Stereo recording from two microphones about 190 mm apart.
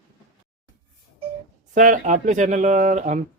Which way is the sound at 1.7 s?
40° right (ahead or behind).